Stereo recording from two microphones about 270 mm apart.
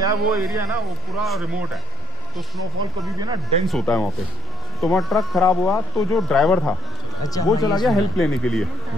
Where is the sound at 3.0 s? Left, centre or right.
Centre.